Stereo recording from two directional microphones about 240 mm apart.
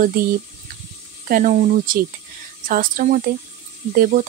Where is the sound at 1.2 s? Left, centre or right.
Right.